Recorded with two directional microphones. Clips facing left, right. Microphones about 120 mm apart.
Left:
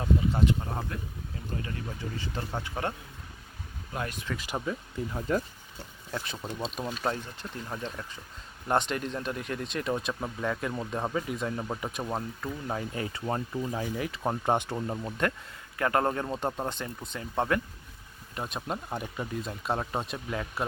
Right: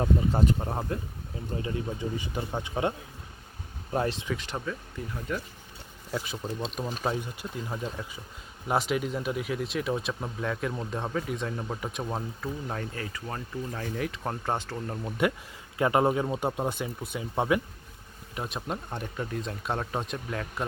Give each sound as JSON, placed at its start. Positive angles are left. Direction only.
{"t": 0.0, "sound": "speech", "side_deg": -40}
{"t": 0.7, "sound": "speech", "side_deg": -25}
{"t": 3.9, "sound": "speech", "side_deg": -30}
{"t": 4.4, "sound": "speech", "side_deg": 10}
{"t": 5.3, "sound": "speech", "side_deg": 30}
{"t": 6.1, "sound": "speech", "side_deg": -5}
{"t": 12.9, "sound": "speech", "side_deg": 25}
{"t": 13.7, "sound": "speech", "side_deg": 15}
{"t": 15.2, "sound": "speech", "side_deg": -10}